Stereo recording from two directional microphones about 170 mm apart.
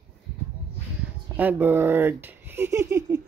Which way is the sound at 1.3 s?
10° right (ahead or behind).